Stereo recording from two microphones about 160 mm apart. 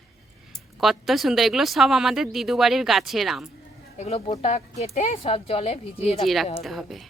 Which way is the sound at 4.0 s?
40° left (ahead or behind).